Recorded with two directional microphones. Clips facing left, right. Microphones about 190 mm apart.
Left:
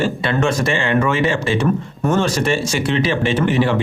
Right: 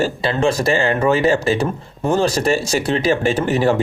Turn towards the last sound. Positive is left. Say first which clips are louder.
# even
turn(degrees=-40)  # may be behind; listen again after turning